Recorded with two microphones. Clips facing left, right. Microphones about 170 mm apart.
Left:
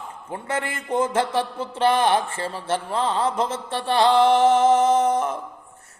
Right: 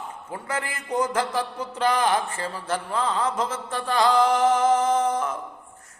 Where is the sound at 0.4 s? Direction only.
25° left (ahead or behind).